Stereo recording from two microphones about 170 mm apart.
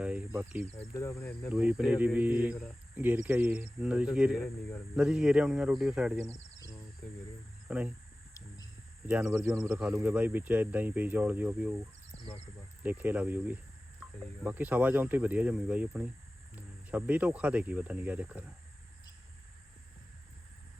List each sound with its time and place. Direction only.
0.0 s cricket: 5° right (ahead or behind)
0.3 s speech: 10° right (ahead or behind)
0.9 s speech: 15° left (ahead or behind)
1.4 s speech: 5° right (ahead or behind)
7.7 s speech: 5° right (ahead or behind)
9.0 s speech: 10° right (ahead or behind)
12.1 s bird: 35° left (ahead or behind)
12.8 s speech: 10° right (ahead or behind)